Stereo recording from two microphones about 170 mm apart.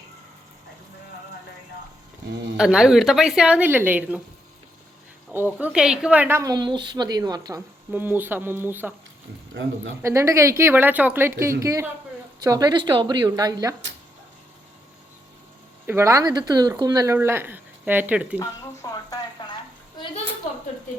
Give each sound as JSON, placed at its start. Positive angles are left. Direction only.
{"t": 2.6, "sound": "speech", "side_deg": -5}
{"t": 5.5, "sound": "a woman's voice", "side_deg": -5}
{"t": 7.9, "sound": "speech", "side_deg": -10}
{"t": 10.0, "sound": "a woman's voice", "side_deg": -15}
{"t": 15.9, "sound": "a woman's voice", "side_deg": -15}
{"t": 18.3, "sound": "speech", "side_deg": 20}